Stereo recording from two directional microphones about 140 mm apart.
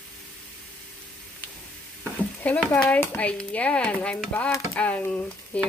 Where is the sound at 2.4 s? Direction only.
5° left (ahead or behind).